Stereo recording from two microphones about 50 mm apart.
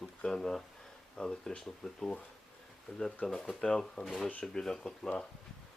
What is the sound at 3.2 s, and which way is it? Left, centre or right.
Speech, centre.